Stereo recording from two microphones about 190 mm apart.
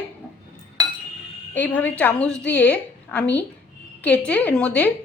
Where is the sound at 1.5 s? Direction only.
10° left (ahead or behind).